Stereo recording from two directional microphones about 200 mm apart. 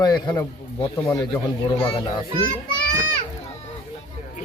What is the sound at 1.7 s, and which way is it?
Speech, 30° left (ahead or behind).